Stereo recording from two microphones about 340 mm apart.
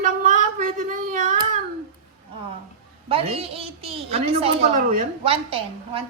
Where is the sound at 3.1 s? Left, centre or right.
Centre.